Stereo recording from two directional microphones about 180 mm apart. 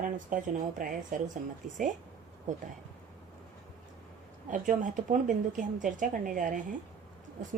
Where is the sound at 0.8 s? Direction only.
50° right (ahead or behind).